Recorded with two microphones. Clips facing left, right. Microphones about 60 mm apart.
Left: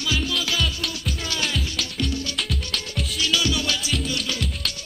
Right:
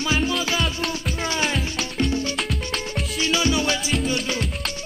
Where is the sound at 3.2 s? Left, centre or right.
Right.